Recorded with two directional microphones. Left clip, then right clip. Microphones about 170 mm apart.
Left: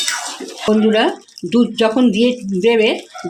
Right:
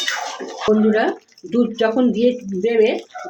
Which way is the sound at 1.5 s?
55° left (ahead or behind).